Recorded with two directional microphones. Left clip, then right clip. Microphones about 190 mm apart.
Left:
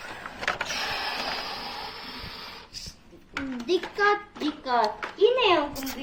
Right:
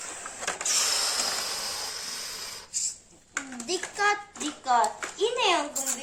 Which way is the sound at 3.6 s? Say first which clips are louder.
Left 3 dB; 60° right (ahead or behind).